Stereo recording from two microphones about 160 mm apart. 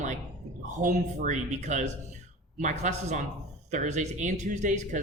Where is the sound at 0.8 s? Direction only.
50° right (ahead or behind).